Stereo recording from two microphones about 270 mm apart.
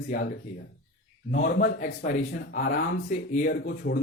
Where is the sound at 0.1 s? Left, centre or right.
Left.